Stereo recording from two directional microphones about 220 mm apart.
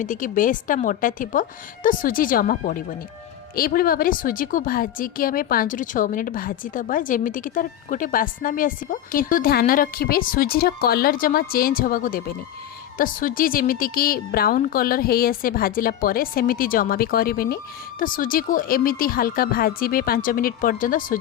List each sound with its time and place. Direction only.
0.0 s a woman's voice: 35° left (ahead or behind)